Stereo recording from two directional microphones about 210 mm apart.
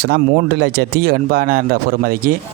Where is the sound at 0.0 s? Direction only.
55° right (ahead or behind).